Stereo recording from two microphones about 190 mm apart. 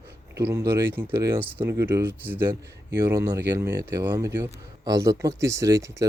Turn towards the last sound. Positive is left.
turn(degrees=-15)  # may be behind; listen again after turning